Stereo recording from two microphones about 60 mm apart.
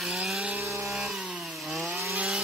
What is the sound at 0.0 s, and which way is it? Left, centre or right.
Sawing, centre.